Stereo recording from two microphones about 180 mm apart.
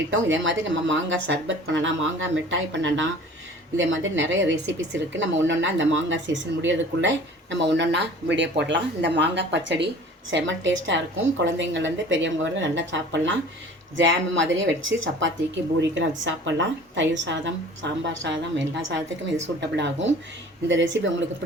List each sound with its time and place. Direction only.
0.1 s speech: 90° right
10.3 s a woman's voice: 90° right
19.7 s speech: 75° right (ahead or behind)
20.7 s speech: 90° right